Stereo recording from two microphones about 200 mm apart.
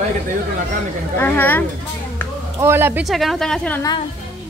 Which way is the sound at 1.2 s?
10° left (ahead or behind).